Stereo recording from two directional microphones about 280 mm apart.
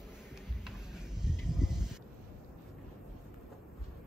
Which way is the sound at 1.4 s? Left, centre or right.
Centre.